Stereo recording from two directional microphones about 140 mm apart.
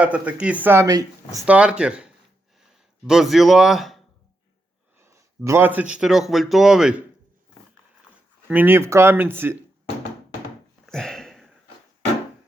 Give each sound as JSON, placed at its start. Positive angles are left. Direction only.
{"t": 0.0, "sound": "speech", "side_deg": -10}
{"t": 1.5, "sound": "speech", "side_deg": -10}
{"t": 3.1, "sound": "speech", "side_deg": 0}
{"t": 4.9, "sound": "speech", "side_deg": -15}
{"t": 8.4, "sound": "speech", "side_deg": -15}
{"t": 10.8, "sound": "sniff", "side_deg": 5}